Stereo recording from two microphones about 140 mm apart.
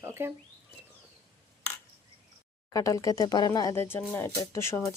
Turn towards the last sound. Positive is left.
turn(degrees=20)  # may be behind; listen again after turning